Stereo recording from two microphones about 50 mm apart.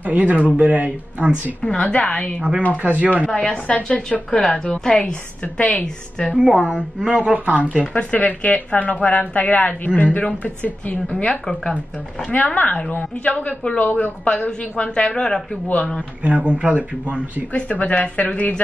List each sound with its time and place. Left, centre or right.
0.0 s speech: right
1.6 s a woman's voice: left
2.8 s speech: right
3.3 s a woman's voice: left
4.3 s a woman's voice: centre
6.3 s speech: centre
7.3 s speech: right
7.9 s a woman's voice: left; by 15.4 s centre
16.2 s speech: right
17.5 s a woman's voice: left